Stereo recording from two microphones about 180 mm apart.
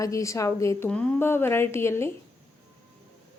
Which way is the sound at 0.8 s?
5° left (ahead or behind).